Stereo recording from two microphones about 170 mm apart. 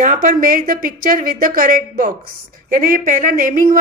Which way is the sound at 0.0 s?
50° right (ahead or behind).